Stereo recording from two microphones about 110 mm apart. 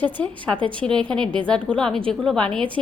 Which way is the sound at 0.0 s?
15° left (ahead or behind).